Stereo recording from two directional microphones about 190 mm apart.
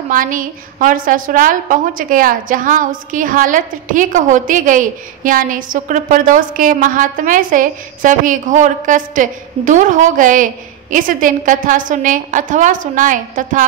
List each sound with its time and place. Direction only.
0.1 s a woman's voice: 45° right (ahead or behind)